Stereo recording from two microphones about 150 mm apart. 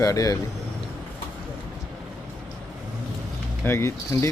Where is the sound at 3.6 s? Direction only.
20° left (ahead or behind).